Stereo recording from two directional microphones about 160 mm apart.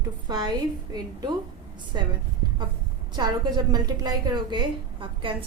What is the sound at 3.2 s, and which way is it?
A woman's voice, 25° right (ahead or behind).